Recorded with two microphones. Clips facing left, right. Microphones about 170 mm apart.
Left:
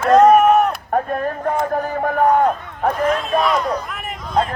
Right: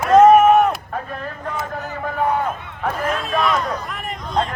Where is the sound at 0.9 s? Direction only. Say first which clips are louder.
Left 8 dB; 50° left (ahead or behind).